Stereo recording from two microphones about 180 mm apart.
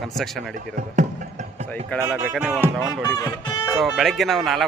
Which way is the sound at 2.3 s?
5° right (ahead or behind).